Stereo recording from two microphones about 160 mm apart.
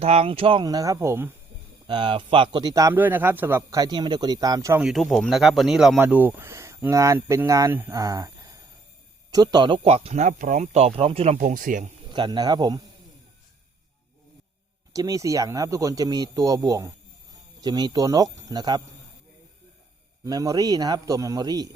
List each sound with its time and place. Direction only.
0.0 s speech: 40° right (ahead or behind); by 1.3 s 15° right (ahead or behind)
1.9 s speech: 30° right (ahead or behind)
4.8 s speech: centre (ahead or behind); by 11.9 s 55° right (ahead or behind)
12.1 s speech: 30° right (ahead or behind)
14.9 s speech: 20° right (ahead or behind)
20.2 s speech: 25° right (ahead or behind)